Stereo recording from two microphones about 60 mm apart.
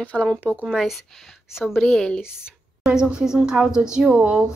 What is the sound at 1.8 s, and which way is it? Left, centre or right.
Speech, centre.